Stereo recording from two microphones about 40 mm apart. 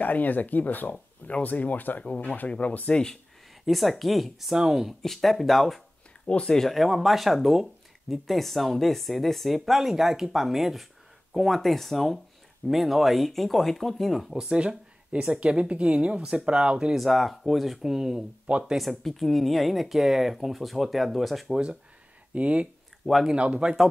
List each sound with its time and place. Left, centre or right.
0.0 s speech: left
1.2 s speech: left
1.5 s speech: left
2.0 s speech: left
2.9 s speech: centre
3.6 s speech: centre
5.0 s speech: centre
6.4 s speech: centre
6.7 s speech: centre
14.3 s speech: right
16.9 s speech: centre
22.3 s speech: right